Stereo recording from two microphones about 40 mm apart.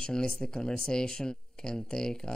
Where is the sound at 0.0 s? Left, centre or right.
Centre.